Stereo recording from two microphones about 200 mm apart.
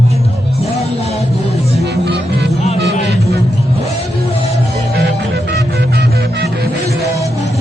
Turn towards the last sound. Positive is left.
turn(degrees=-55)  # may be behind; listen again after turning